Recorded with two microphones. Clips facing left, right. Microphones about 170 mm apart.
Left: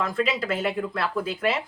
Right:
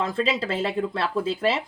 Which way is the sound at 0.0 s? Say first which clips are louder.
Right 1 dB; 30° right (ahead or behind).